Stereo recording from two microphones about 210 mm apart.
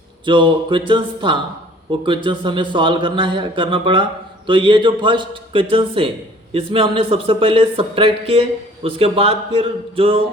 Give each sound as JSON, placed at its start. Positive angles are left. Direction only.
{"t": 0.3, "sound": "a man's voice", "side_deg": -20}